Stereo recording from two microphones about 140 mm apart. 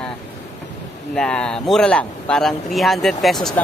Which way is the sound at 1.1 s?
5° left (ahead or behind).